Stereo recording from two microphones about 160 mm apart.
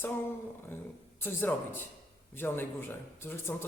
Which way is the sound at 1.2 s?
15° left (ahead or behind).